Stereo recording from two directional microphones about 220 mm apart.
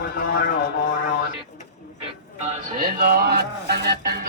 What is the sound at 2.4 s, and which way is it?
Speech, 35° right (ahead or behind).